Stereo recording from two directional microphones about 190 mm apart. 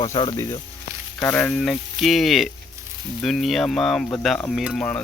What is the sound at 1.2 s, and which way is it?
Speech, 10° left (ahead or behind).